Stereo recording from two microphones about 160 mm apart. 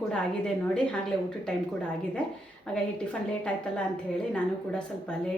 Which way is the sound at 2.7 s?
5° left (ahead or behind).